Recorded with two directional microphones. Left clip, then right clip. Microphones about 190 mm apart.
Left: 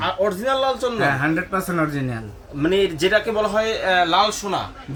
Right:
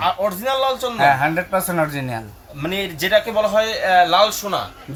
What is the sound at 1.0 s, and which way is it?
Speech, 25° right (ahead or behind).